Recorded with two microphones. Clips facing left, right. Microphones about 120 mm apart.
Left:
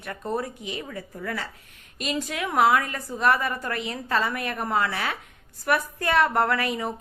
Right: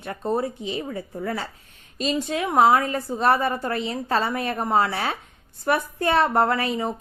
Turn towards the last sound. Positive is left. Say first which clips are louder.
# right 3 dB
turn(degrees=-30)  # may be behind; listen again after turning